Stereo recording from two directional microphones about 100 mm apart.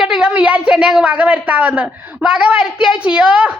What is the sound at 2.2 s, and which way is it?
A woman's voice, 10° right (ahead or behind).